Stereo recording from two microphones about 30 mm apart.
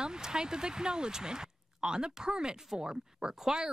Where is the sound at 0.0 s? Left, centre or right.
Right.